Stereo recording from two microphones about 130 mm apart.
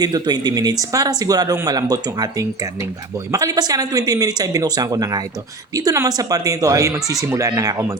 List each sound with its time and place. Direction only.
0.0 s speech: 30° right (ahead or behind)